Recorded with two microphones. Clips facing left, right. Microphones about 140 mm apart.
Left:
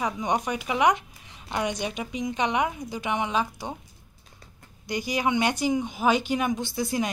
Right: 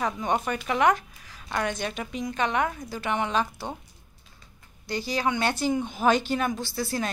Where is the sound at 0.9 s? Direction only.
20° left (ahead or behind).